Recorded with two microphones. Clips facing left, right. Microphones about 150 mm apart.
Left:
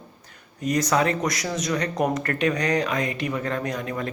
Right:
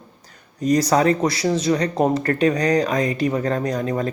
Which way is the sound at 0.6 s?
35° right (ahead or behind).